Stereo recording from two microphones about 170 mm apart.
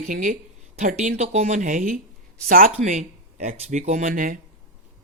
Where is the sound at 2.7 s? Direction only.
40° right (ahead or behind).